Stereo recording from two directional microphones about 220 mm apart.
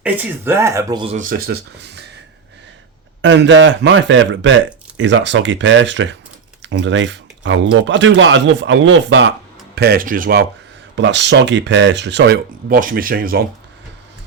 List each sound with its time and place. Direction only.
0.0 s speech: 10° right (ahead or behind)
1.1 s speech: 40° right (ahead or behind)
3.2 s speech: 55° right (ahead or behind)
9.7 s speech: 45° right (ahead or behind)
10.9 s speech: 55° right (ahead or behind)